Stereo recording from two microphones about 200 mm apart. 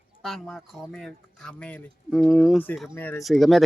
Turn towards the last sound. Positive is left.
turn(degrees=0)  # may be behind; listen again after turning